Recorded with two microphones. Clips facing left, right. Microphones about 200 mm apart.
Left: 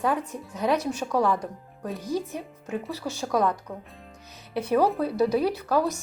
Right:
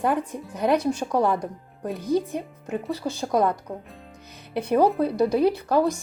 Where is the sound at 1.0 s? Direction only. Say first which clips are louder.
Right 2 dB; 20° right (ahead or behind).